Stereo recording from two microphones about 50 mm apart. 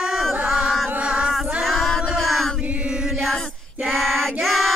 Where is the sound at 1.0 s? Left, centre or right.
Centre.